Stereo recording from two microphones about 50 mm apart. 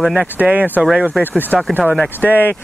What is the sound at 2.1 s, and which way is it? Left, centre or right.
Speech, left.